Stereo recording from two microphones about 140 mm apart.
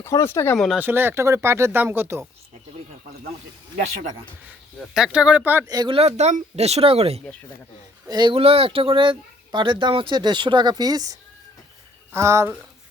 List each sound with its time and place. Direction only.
0.0 s speech: 20° left (ahead or behind)
0.5 s speech: centre (ahead or behind)
0.8 s speech: 15° right (ahead or behind)
4.8 s speech: 5° right (ahead or behind)
5.6 s speech: 30° right (ahead or behind)
5.9 s speech: 50° right (ahead or behind)
8.0 s speech: 30° right (ahead or behind)